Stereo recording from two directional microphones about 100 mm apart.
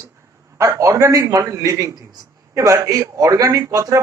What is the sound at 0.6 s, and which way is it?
A man's voice, 30° right (ahead or behind).